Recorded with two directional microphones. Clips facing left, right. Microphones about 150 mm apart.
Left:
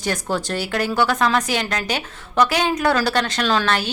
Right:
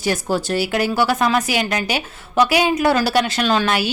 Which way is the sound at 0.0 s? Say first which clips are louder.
Right 3 dB; 5° right (ahead or behind).